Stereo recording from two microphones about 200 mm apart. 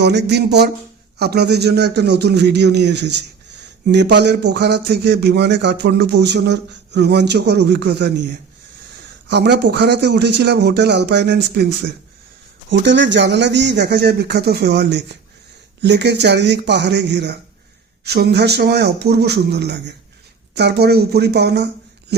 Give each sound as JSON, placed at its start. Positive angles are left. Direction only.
{"t": 0.0, "sound": "speech", "side_deg": -55}